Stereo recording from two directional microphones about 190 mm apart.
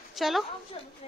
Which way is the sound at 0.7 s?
30° left (ahead or behind).